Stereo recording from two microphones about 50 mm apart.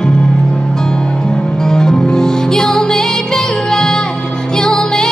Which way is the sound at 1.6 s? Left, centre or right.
Centre.